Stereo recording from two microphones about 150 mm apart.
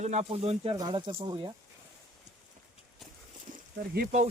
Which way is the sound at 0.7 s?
30° right (ahead or behind).